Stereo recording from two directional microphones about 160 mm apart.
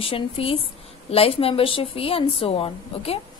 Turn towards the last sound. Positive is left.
turn(degrees=35)  # may be behind; listen again after turning